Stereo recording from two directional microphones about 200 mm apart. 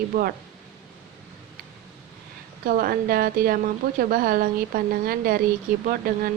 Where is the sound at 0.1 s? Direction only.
45° right (ahead or behind).